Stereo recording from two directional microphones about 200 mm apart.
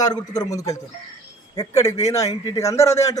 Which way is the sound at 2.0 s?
15° left (ahead or behind).